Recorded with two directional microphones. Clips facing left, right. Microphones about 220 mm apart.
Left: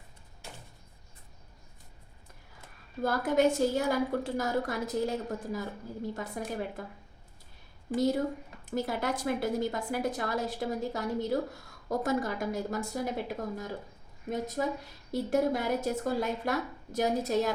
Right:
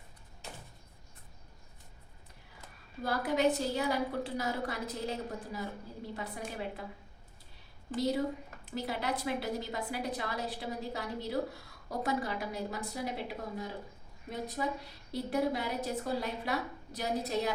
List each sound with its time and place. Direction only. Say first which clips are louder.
3.0 s a woman's voice: left 4 dB; 45° left (ahead or behind)
7.9 s a woman's voice: left 4 dB; 45° left (ahead or behind)